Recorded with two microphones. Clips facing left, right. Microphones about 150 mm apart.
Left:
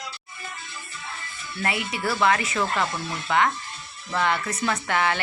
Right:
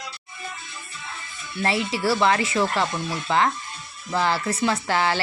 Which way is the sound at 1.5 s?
30° right (ahead or behind).